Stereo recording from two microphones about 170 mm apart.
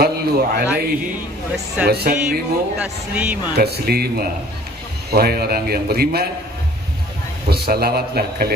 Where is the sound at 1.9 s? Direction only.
65° right (ahead or behind).